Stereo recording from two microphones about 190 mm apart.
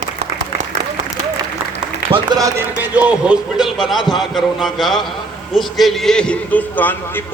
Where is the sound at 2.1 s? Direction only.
20° right (ahead or behind).